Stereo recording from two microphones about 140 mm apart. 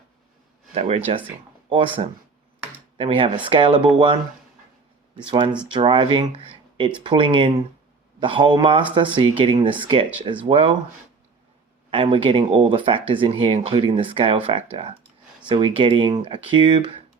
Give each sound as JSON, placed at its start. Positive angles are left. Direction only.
{"t": 0.7, "sound": "speech", "side_deg": -45}
{"t": 3.0, "sound": "speech", "side_deg": -40}
{"t": 11.9, "sound": "speech", "side_deg": -40}